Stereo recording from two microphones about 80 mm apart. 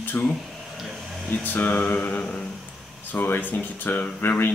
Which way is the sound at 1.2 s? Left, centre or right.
Centre.